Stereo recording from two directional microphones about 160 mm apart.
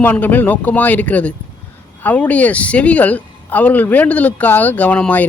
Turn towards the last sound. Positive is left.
turn(degrees=10)  # may be behind; listen again after turning